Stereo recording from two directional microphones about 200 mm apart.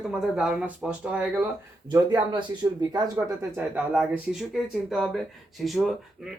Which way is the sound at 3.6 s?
5° right (ahead or behind).